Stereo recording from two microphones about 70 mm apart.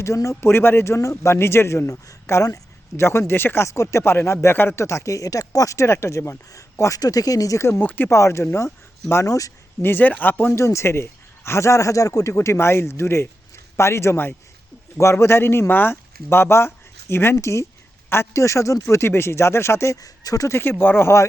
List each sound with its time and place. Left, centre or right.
0.0 s a man's voice: left
3.7 s a man's voice: left
7.0 s speech: left
7.8 s speech: left
8.1 s a man's voice: left
9.8 s speech: left
17.3 s a man's voice: left
20.5 s speech: left